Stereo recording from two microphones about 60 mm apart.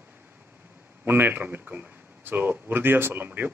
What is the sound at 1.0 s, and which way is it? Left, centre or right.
A man's voice, right.